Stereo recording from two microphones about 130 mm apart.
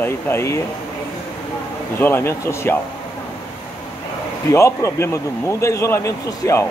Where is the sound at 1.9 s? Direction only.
15° left (ahead or behind).